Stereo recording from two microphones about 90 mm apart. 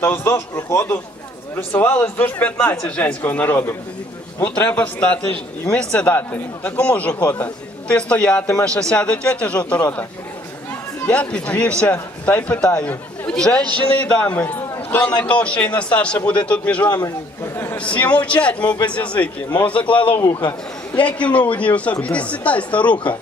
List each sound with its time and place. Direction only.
0.0 s a man's voice: 25° left (ahead or behind)
11.1 s a man's voice: 15° left (ahead or behind)